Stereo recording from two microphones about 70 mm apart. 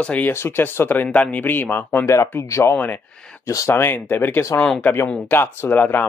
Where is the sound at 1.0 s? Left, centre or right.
Centre.